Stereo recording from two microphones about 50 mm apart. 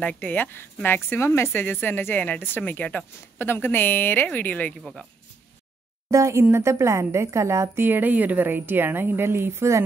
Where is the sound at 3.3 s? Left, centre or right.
Left.